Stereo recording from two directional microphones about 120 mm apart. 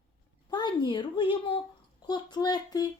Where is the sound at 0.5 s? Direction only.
40° left (ahead or behind).